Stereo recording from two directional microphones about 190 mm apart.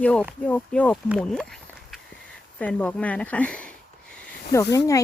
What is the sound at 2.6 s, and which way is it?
Speech, 5° left (ahead or behind).